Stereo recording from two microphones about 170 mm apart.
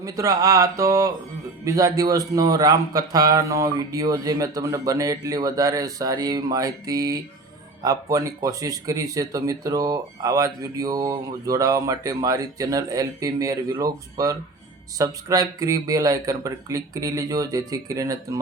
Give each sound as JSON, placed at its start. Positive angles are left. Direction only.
{"t": 0.0, "sound": "speech", "side_deg": -20}